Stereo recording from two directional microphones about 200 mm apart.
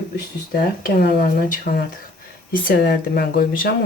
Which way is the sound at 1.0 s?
50° left (ahead or behind).